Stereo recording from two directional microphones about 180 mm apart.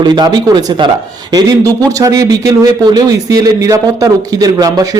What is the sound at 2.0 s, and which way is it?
Speech, 20° right (ahead or behind).